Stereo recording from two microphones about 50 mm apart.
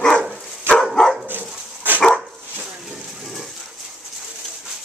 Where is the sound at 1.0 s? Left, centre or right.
Centre.